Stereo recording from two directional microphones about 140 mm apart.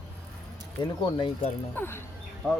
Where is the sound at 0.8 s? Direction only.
35° left (ahead or behind).